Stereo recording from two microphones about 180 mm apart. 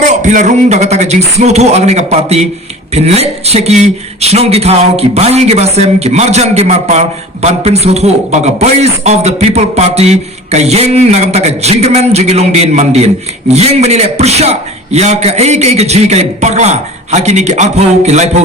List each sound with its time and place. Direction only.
0.0 s a man's voice: 45° right (ahead or behind)